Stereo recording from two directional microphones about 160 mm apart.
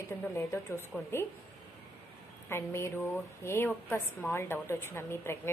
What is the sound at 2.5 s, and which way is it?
A woman's voice, 15° left (ahead or behind).